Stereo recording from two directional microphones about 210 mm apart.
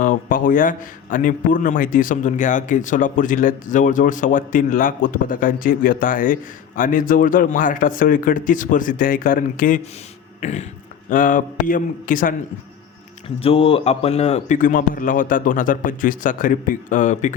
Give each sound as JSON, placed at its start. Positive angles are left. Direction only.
{"t": 0.0, "sound": "a man's voice", "side_deg": 40}
{"t": 13.2, "sound": "a man's voice", "side_deg": 25}